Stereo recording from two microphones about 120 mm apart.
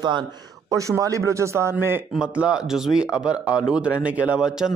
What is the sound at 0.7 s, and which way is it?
Speech, 25° right (ahead or behind).